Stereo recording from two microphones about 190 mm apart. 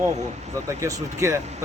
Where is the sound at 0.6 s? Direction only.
15° right (ahead or behind).